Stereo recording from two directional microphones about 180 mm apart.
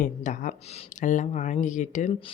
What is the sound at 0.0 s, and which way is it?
Speech, 45° left (ahead or behind).